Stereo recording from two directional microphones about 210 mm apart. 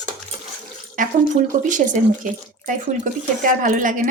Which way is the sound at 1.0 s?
40° right (ahead or behind).